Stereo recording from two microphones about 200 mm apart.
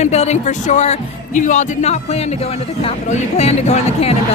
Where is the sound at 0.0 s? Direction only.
35° left (ahead or behind).